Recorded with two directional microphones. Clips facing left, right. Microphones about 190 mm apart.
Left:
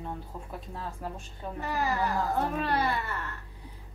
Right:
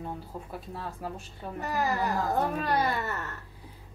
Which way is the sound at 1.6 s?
40° right (ahead or behind).